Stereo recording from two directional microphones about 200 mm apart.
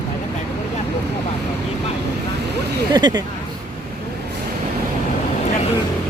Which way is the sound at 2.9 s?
20° right (ahead or behind).